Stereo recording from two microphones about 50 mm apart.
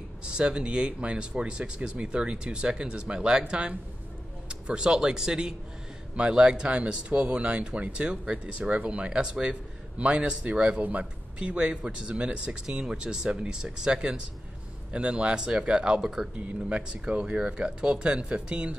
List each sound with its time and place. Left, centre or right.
0.2 s speech: centre
10.8 s speech: right; by 16.3 s centre
16.3 s speech: right